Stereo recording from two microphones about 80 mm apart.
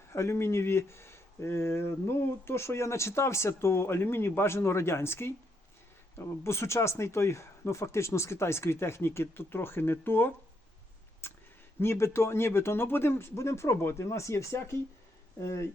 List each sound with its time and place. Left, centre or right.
0.1 s speech: left